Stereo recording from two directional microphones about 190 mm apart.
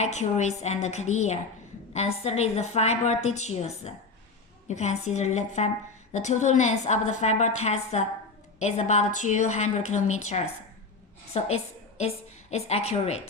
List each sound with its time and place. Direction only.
0.0 s a woman's voice: 40° left (ahead or behind)